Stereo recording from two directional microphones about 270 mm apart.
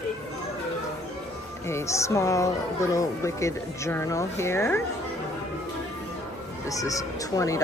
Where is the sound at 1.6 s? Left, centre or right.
Centre.